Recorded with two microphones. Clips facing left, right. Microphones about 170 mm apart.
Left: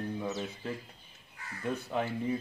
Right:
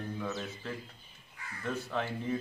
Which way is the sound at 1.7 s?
15° left (ahead or behind).